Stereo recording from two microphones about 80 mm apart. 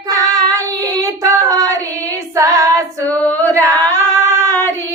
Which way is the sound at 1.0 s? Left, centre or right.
Right.